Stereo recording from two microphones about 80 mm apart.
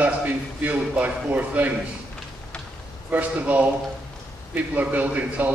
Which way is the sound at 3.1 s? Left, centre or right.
Centre.